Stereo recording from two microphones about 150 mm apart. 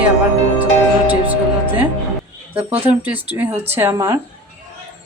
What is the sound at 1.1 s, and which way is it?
A woman's voice, 10° right (ahead or behind).